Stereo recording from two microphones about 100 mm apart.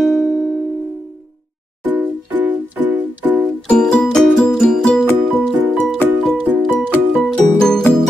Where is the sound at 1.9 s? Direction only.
20° right (ahead or behind).